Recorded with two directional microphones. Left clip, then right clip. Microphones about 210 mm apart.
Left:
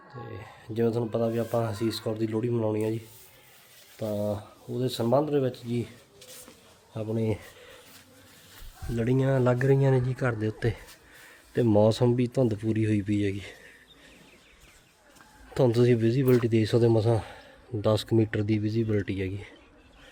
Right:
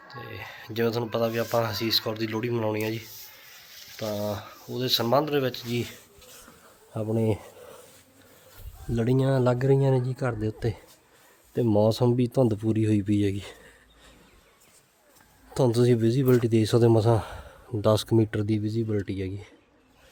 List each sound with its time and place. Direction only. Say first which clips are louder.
0.3 s speech: right 3 dB; centre (ahead or behind)
4.2 s speech: even; centre (ahead or behind)
6.9 s speech: right 3 dB; 30° right (ahead or behind)
9.0 s speech: right 1 dB; 25° right (ahead or behind)
15.5 s speech: even; 25° right (ahead or behind)